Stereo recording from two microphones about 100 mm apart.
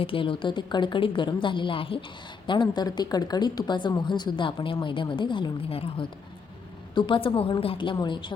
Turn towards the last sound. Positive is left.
turn(degrees=65)  # may be behind; listen again after turning